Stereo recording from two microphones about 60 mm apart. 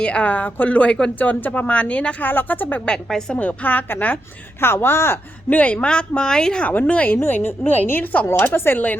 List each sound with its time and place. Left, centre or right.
0.0 s a woman's voice: left
1.2 s a woman's voice: left
2.2 s speech: left
3.1 s a woman's voice: centre
3.3 s a woman's voice: left
5.5 s a woman's voice: left